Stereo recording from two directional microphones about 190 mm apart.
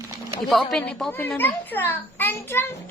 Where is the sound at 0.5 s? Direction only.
5° left (ahead or behind).